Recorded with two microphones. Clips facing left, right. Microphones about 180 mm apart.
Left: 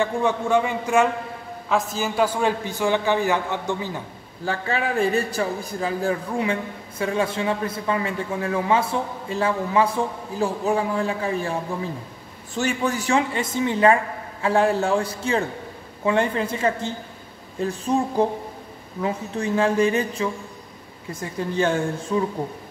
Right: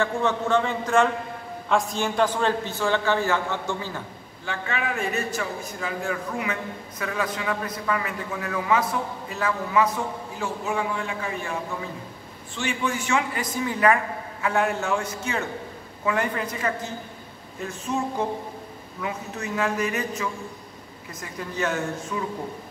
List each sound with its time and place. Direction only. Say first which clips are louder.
0.0 s a man's voice: left 2 dB; 10° left (ahead or behind)
4.5 s a man's voice: left 4 dB; 35° left (ahead or behind)
12.5 s a man's voice: left 4 dB; 40° left (ahead or behind)